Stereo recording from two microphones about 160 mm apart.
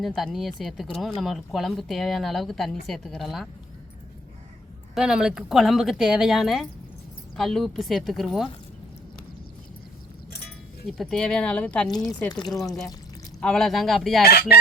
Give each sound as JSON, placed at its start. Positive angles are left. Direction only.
{"t": 0.0, "sound": "a woman's voice", "side_deg": 0}
{"t": 4.9, "sound": "a woman's voice", "side_deg": -5}
{"t": 10.8, "sound": "a woman's voice", "side_deg": 0}
{"t": 11.9, "sound": "a woman's voice", "side_deg": 25}
{"t": 13.4, "sound": "a woman's voice", "side_deg": 5}